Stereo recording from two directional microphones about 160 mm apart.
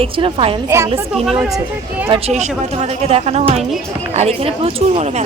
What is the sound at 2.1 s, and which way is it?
Speech, 40° right (ahead or behind).